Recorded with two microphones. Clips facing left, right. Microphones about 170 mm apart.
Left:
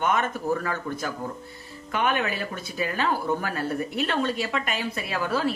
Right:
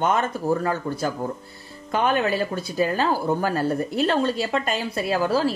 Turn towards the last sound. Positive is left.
turn(degrees=-35)  # may be behind; listen again after turning